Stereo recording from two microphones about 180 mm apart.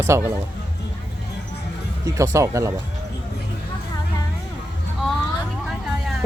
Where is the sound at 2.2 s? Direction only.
15° right (ahead or behind).